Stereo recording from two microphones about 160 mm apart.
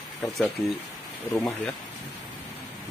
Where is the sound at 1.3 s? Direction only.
10° left (ahead or behind).